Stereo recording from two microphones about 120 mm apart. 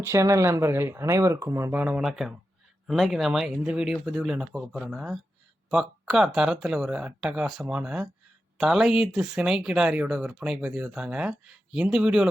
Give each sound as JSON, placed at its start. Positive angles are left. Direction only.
{"t": 0.0, "sound": "speech", "side_deg": -20}